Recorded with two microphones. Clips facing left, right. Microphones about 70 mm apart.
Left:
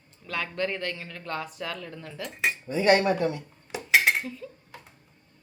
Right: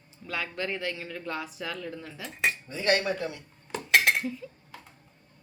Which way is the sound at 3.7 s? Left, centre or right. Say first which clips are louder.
Left 1 dB; centre.